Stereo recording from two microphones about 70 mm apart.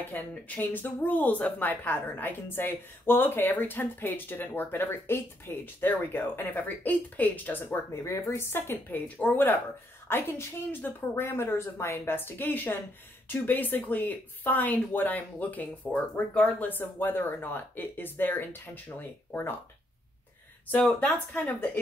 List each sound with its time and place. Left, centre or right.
0.0 s speech: left
7.9 s a woman's voice: left
20.8 s speech: centre
21.5 s speech: left